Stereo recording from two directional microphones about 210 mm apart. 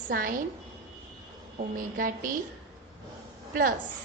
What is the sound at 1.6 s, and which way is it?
Speech, 40° right (ahead or behind).